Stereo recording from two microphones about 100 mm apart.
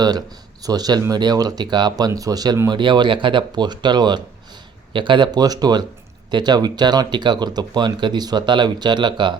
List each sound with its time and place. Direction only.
0.0 s speech: 40° right (ahead or behind)
2.6 s speech: 50° right (ahead or behind)